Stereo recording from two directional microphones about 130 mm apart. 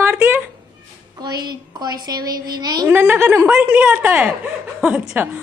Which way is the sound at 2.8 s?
15° right (ahead or behind).